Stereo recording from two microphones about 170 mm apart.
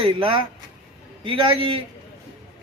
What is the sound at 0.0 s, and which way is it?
Speech, 30° right (ahead or behind).